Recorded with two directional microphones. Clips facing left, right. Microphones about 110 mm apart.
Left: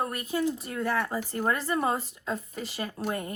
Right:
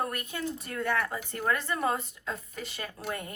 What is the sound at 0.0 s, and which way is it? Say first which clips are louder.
Speech: left 5 dB; 30° left (ahead or behind).